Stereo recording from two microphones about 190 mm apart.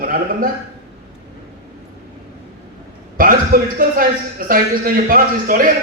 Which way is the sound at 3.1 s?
45° right (ahead or behind).